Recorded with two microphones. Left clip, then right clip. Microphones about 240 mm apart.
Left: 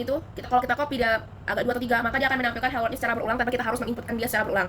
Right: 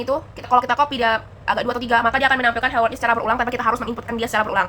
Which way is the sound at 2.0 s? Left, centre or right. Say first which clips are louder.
Right 7 dB; right.